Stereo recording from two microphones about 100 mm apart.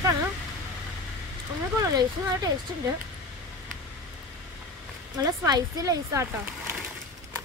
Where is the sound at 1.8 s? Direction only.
40° right (ahead or behind).